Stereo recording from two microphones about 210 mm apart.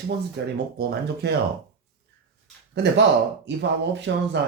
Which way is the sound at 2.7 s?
55° right (ahead or behind).